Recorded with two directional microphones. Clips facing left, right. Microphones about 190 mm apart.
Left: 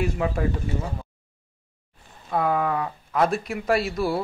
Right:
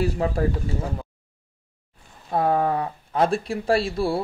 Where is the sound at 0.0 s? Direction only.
35° right (ahead or behind).